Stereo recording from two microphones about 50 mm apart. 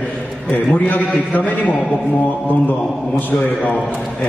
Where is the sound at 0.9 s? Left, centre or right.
Left.